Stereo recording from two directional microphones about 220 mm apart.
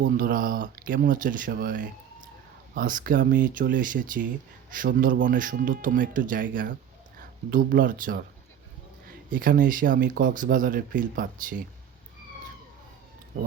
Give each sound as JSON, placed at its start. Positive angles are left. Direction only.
{"t": 0.1, "sound": "speech", "side_deg": -40}
{"t": 9.3, "sound": "speech", "side_deg": -40}